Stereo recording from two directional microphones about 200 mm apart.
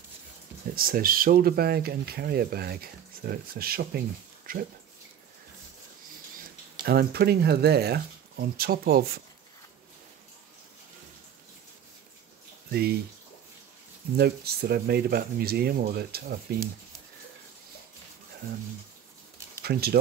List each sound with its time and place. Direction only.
0.7 s speech: 45° right (ahead or behind)
6.8 s speech: 50° right (ahead or behind)
14.1 s speech: 50° right (ahead or behind)
19.6 s speech: 50° right (ahead or behind)